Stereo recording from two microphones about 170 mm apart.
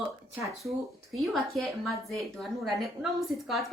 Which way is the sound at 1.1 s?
Centre (ahead or behind).